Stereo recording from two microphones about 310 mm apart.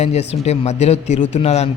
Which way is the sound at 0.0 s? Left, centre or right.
Left.